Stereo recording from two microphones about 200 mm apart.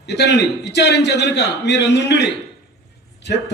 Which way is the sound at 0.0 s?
60° left (ahead or behind).